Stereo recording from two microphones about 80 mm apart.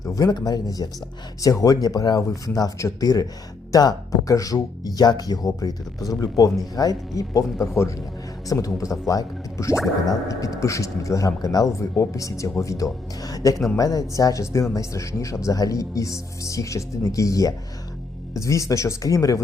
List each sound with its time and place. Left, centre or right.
0.0 s speech: left